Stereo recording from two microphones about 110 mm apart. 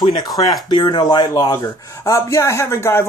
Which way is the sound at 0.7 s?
40° left (ahead or behind).